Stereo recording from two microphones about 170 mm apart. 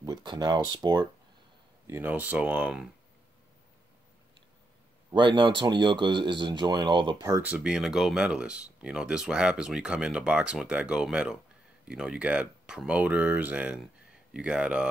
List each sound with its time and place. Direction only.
0.0 s speech: 25° right (ahead or behind)
1.9 s speech: 10° right (ahead or behind)
5.1 s speech: 30° right (ahead or behind)
7.4 s speech: 5° right (ahead or behind)